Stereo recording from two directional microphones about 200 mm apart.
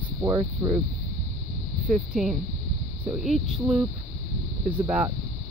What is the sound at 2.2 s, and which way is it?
Speech, centre (ahead or behind).